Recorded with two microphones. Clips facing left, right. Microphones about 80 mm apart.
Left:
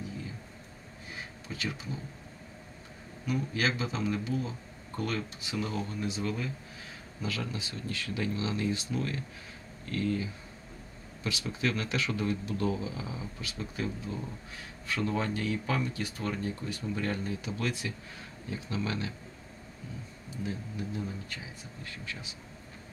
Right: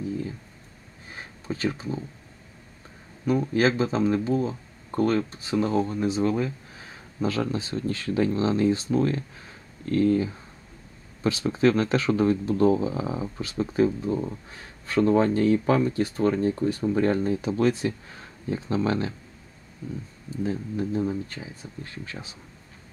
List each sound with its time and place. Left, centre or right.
1.1 s a sound: right
3.3 s speech: right
20.4 s speech: right